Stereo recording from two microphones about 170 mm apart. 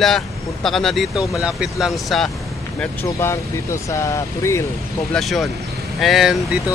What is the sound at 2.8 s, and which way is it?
Speech, 15° left (ahead or behind).